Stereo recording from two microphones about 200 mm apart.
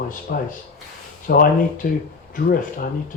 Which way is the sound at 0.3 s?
50° left (ahead or behind).